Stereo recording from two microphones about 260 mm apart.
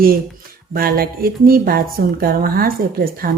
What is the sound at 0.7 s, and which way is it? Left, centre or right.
A woman's voice, right.